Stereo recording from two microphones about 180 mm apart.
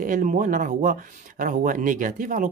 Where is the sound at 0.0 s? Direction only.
45° right (ahead or behind).